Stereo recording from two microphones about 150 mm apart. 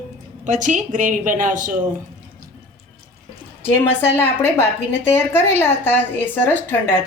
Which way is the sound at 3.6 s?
15° left (ahead or behind).